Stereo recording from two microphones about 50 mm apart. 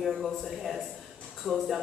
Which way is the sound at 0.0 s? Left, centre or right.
Centre.